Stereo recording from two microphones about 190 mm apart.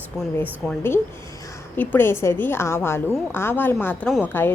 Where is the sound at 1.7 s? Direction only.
10° left (ahead or behind).